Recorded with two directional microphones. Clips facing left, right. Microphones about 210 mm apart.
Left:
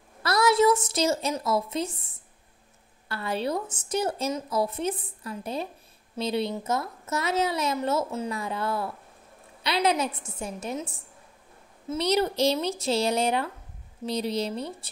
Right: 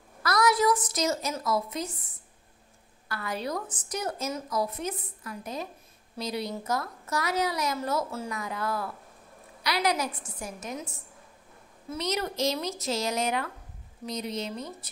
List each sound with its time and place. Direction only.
0.2 s a sound: 25° left (ahead or behind)
1.3 s a woman's voice: 25° left (ahead or behind)
11.9 s speech: 30° left (ahead or behind)